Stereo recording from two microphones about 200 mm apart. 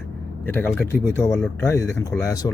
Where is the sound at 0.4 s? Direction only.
10° left (ahead or behind).